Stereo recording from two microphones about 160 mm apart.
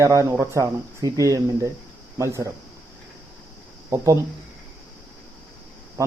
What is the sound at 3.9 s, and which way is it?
Speech, 20° right (ahead or behind).